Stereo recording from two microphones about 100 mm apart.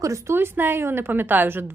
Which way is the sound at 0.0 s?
30° right (ahead or behind).